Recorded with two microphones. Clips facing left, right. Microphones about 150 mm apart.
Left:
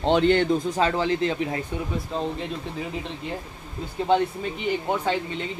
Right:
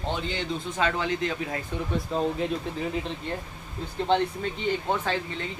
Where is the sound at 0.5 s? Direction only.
35° left (ahead or behind).